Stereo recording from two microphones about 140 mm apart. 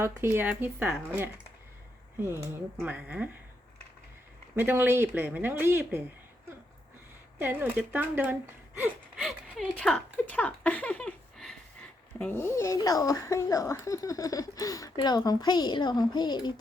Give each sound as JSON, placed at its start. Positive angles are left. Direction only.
{"t": 0.0, "sound": "speech", "side_deg": -15}
{"t": 2.8, "sound": "speech", "side_deg": -10}
{"t": 4.5, "sound": "speech", "side_deg": -15}
{"t": 7.3, "sound": "speech", "side_deg": -15}
{"t": 9.1, "sound": "a sound", "side_deg": 0}
{"t": 12.2, "sound": "speech", "side_deg": 20}